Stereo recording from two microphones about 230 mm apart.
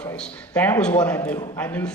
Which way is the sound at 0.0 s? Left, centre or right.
Centre.